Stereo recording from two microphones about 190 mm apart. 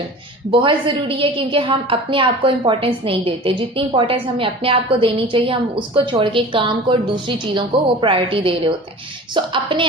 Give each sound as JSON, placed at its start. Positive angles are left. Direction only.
{"t": 0.5, "sound": "a woman's voice", "side_deg": -25}